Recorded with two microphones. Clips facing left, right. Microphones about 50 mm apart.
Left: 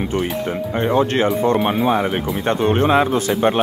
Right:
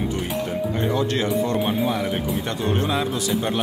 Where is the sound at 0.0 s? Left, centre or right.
Left.